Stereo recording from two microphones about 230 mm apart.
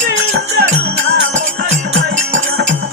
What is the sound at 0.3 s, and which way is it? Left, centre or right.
Music, right.